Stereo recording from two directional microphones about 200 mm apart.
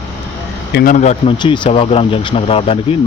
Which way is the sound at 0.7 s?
55° left (ahead or behind).